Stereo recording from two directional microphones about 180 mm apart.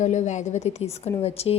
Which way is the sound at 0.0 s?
40° left (ahead or behind).